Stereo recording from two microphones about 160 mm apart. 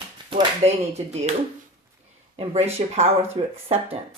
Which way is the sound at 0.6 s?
40° right (ahead or behind).